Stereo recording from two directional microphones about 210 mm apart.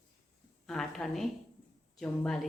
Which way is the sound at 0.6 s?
Centre (ahead or behind).